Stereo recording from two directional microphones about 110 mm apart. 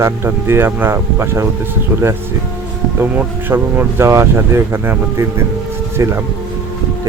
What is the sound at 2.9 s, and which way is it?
Speech, 15° right (ahead or behind).